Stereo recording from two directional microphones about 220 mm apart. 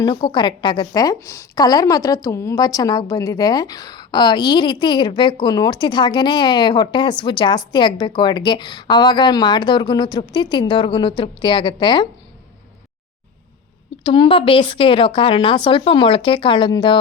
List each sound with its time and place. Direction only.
0.0 s a woman's voice: 20° left (ahead or behind)
14.0 s a woman's voice: 25° left (ahead or behind)